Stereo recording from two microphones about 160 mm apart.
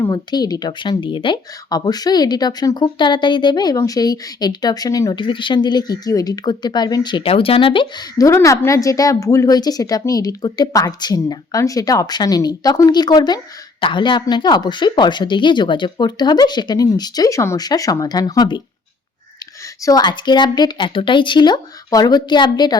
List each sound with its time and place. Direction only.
0.0 s speech: 25° left (ahead or behind)
19.8 s speech: 25° left (ahead or behind)